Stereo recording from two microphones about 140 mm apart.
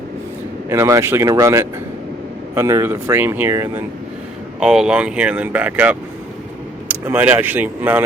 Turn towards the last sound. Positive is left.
turn(degrees=-15)  # may be behind; listen again after turning